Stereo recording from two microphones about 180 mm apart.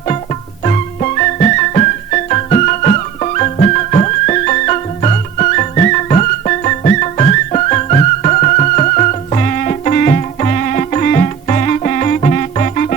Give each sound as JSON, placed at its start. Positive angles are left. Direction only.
{"t": 0.6, "sound": "music", "side_deg": 40}